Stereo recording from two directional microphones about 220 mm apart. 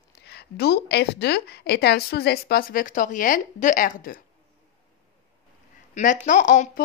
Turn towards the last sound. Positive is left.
turn(degrees=35)  # may be behind; listen again after turning